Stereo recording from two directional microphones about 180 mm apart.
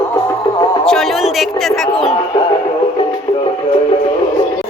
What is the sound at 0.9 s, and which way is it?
Music, centre (ahead or behind).